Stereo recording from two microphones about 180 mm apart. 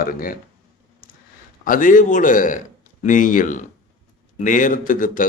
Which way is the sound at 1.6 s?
50° left (ahead or behind).